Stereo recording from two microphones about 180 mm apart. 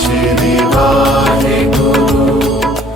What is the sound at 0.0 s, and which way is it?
Music, centre (ahead or behind).